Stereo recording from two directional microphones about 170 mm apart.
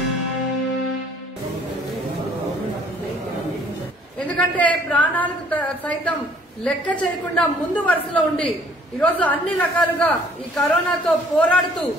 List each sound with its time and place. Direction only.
4.6 s a woman's voice: 10° left (ahead or behind)